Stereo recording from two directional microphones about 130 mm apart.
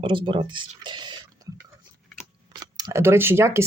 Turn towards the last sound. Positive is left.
turn(degrees=-20)  # may be behind; listen again after turning